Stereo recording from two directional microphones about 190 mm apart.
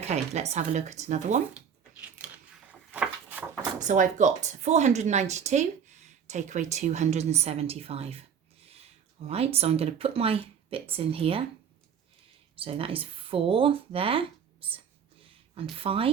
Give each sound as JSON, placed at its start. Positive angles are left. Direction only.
{"t": 0.0, "sound": "speech", "side_deg": -35}
{"t": 1.5, "sound": "a sound", "side_deg": -10}
{"t": 3.8, "sound": "speech", "side_deg": -40}
{"t": 9.2, "sound": "speech", "side_deg": -30}
{"t": 12.5, "sound": "speech", "side_deg": -30}
{"t": 15.8, "sound": "speech", "side_deg": -30}